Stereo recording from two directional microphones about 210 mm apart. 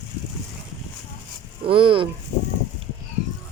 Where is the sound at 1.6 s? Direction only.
25° right (ahead or behind).